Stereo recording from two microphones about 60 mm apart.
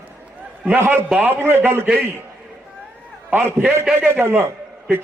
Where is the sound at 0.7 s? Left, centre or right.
Right.